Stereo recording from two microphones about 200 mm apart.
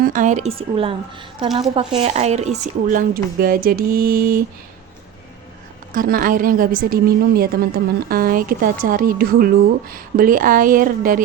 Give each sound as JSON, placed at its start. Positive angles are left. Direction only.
{"t": 0.0, "sound": "speech", "side_deg": -40}
{"t": 2.0, "sound": "a woman's voice", "side_deg": -30}
{"t": 5.9, "sound": "a woman's voice", "side_deg": -45}